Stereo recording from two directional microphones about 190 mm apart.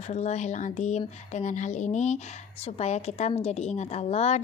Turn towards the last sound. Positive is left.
turn(degrees=35)  # may be behind; listen again after turning